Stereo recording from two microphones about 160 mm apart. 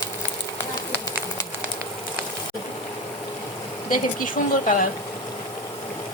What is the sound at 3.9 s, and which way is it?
Speech, 55° left (ahead or behind).